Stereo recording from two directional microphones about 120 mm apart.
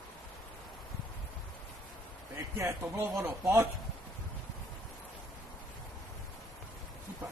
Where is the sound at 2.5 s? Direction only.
25° right (ahead or behind).